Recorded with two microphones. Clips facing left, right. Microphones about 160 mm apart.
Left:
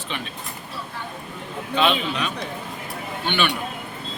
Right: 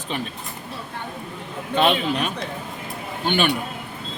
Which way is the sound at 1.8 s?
50° right (ahead or behind).